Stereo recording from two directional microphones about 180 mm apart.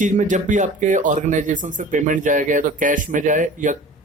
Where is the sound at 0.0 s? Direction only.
45° right (ahead or behind).